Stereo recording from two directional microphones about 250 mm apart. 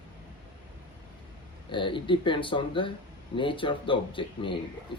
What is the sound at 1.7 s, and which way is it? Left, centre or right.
Speech, centre.